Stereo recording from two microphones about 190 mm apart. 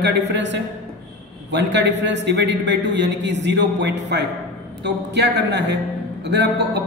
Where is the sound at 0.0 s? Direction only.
65° right (ahead or behind).